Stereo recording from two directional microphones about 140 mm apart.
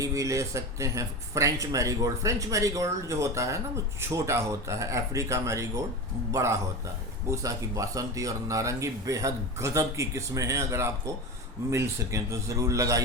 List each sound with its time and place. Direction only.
0.0 s speech: 25° right (ahead or behind)